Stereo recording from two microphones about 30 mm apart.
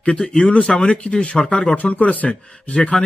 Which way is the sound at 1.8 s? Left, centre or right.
Left.